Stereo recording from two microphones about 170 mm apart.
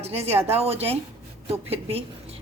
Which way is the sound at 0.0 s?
40° right (ahead or behind).